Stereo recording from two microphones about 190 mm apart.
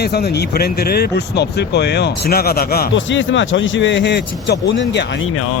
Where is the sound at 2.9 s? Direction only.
75° left (ahead or behind).